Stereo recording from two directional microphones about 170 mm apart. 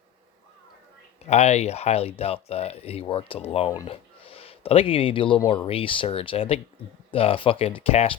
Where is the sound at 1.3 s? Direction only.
40° left (ahead or behind).